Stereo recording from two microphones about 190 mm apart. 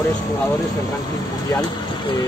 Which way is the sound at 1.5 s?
20° left (ahead or behind).